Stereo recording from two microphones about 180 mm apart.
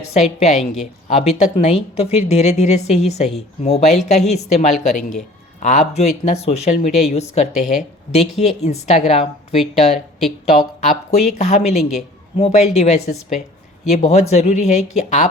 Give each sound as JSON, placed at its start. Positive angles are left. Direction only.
{"t": 0.4, "sound": "speech", "side_deg": 40}